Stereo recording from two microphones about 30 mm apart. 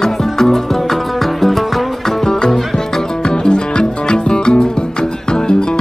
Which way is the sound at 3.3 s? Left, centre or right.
Left.